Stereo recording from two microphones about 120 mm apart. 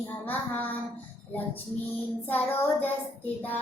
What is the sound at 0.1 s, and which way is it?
A child's voice, 15° left (ahead or behind).